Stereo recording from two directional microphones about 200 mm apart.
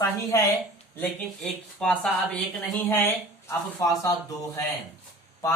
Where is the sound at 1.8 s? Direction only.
5° left (ahead or behind).